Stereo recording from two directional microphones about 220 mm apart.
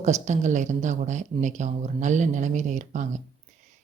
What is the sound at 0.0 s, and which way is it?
Speech, 35° right (ahead or behind).